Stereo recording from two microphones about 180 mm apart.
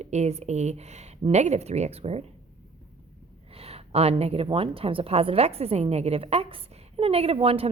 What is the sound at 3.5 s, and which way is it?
A woman's voice, 35° right (ahead or behind).